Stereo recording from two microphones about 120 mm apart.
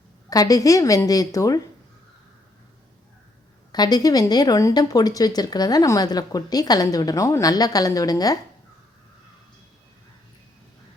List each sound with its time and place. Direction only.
0.3 s a woman's voice: 30° left (ahead or behind)
3.7 s speech: 35° left (ahead or behind)